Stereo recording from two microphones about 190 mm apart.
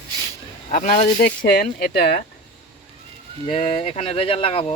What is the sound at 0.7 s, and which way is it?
Speech, 45° left (ahead or behind).